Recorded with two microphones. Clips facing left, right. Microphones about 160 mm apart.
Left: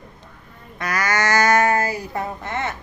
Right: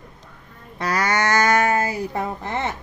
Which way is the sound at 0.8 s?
30° right (ahead or behind).